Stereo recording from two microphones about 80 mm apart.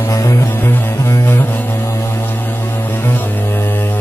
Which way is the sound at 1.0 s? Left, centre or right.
Left.